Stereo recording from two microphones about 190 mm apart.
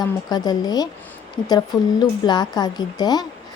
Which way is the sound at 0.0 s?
20° left (ahead or behind).